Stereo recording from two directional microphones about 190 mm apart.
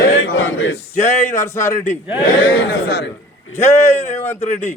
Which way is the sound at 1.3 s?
15° left (ahead or behind).